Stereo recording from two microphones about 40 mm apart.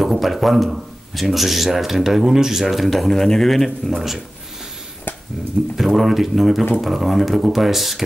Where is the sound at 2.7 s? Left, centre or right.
Centre.